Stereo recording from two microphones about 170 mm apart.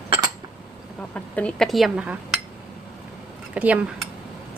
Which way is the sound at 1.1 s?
5° left (ahead or behind).